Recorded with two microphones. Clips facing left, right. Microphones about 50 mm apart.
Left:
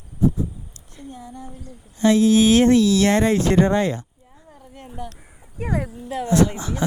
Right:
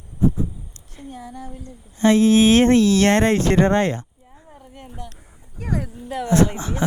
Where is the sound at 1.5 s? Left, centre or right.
Right.